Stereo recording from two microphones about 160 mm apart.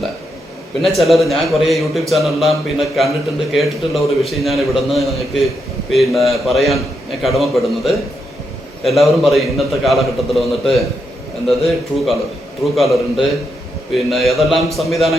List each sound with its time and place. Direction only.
0.8 s a man's voice: centre (ahead or behind)